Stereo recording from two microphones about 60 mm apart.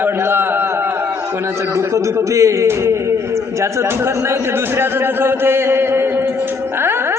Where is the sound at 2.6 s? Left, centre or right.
Right.